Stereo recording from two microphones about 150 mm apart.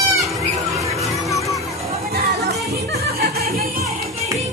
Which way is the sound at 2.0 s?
90° right.